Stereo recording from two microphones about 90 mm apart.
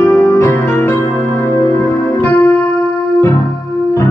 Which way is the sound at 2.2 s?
15° left (ahead or behind).